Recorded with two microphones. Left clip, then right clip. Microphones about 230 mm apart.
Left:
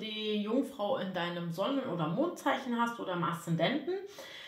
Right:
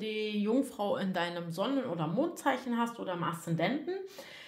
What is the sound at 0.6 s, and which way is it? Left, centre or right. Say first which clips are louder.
Speech: even; right.